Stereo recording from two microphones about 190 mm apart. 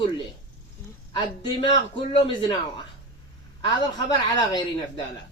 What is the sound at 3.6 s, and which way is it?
A woman's voice, 20° left (ahead or behind).